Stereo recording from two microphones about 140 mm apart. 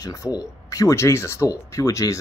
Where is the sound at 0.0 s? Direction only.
25° left (ahead or behind).